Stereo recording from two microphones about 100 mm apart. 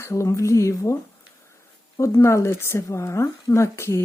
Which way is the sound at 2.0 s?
30° left (ahead or behind).